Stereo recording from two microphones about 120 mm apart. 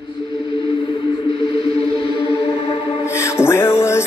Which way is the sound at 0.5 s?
45° left (ahead or behind).